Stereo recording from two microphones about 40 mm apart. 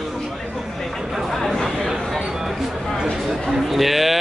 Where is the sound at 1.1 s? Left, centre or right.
Centre.